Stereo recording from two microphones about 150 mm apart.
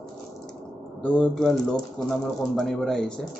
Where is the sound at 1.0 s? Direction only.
5° left (ahead or behind).